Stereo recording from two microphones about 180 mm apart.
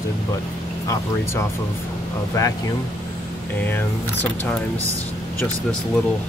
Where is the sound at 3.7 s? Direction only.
10° left (ahead or behind).